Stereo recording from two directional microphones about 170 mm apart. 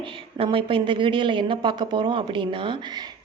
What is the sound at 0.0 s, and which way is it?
Speech, 30° right (ahead or behind).